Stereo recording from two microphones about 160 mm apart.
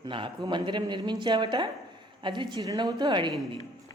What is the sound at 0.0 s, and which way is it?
Speech, 30° right (ahead or behind).